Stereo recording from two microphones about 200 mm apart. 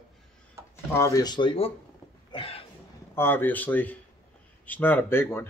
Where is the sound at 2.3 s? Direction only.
30° left (ahead or behind).